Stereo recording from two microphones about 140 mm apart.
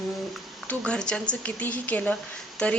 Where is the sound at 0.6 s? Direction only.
5° left (ahead or behind).